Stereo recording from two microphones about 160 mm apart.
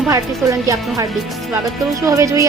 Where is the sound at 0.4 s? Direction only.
20° right (ahead or behind).